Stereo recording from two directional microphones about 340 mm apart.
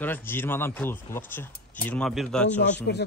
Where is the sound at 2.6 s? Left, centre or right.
Left.